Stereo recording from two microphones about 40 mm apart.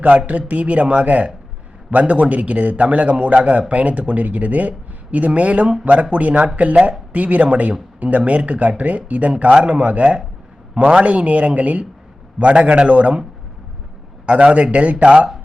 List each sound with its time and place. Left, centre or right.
0.3 s a man's voice: right
14.3 s a man's voice: right